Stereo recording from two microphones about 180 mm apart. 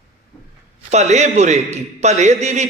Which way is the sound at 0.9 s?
40° right (ahead or behind).